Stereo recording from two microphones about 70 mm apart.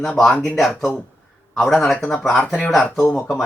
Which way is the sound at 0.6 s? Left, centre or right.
Centre.